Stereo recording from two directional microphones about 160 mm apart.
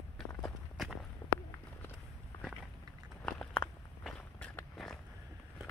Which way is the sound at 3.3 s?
10° left (ahead or behind).